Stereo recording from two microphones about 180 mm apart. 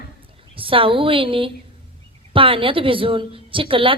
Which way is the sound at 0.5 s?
30° right (ahead or behind).